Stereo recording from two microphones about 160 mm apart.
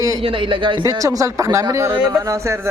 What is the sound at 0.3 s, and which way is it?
Speech, 30° right (ahead or behind).